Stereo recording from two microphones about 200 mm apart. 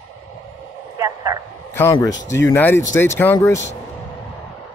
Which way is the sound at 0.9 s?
15° right (ahead or behind).